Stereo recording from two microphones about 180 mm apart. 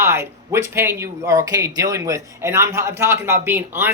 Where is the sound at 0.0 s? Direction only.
15° right (ahead or behind).